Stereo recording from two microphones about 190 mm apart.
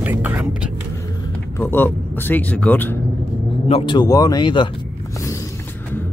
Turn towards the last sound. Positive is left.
turn(degrees=25)  # may be behind; listen again after turning